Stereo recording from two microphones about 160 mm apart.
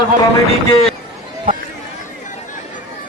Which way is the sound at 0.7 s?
40° left (ahead or behind).